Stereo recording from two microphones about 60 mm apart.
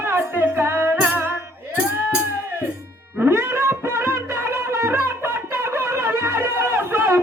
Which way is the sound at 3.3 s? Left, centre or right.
Right.